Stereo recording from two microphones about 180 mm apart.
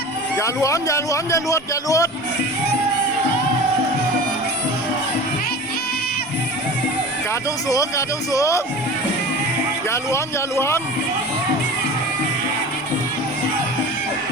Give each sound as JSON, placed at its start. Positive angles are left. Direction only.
{"t": 0.3, "sound": "a man's voice", "side_deg": 15}
{"t": 7.7, "sound": "a man's voice", "side_deg": 20}
{"t": 9.9, "sound": "a man's voice", "side_deg": 15}